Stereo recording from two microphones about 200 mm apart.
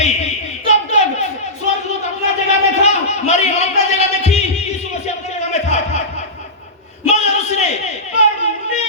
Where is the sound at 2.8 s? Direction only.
35° left (ahead or behind).